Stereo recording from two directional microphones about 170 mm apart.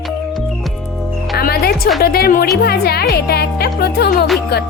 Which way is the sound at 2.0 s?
65° left (ahead or behind).